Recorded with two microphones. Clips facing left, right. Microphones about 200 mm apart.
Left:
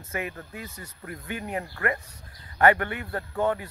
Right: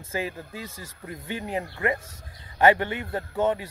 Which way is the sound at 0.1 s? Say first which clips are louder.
Right 2 dB; 25° right (ahead or behind).